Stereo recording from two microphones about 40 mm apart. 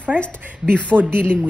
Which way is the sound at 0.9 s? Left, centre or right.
Right.